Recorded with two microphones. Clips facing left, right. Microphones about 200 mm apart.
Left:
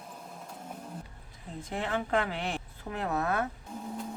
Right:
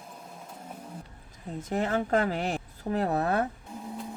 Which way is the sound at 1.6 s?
40° right (ahead or behind).